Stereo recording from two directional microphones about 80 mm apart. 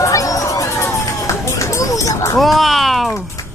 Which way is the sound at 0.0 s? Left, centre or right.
Left.